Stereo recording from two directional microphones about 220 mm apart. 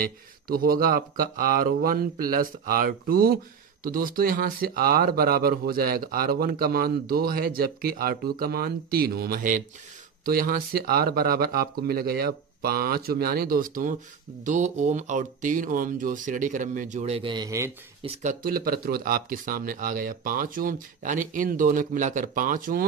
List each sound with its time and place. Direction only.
0.0 s speech: 40° right (ahead or behind); by 17.6 s 15° right (ahead or behind)
18.0 s speech: 30° right (ahead or behind)